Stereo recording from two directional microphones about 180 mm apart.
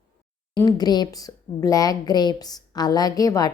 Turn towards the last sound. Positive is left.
turn(degrees=20)  # may be behind; listen again after turning